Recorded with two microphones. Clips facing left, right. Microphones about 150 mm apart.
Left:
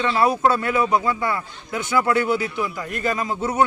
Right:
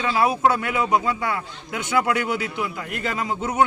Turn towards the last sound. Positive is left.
turn(degrees=-20)  # may be behind; listen again after turning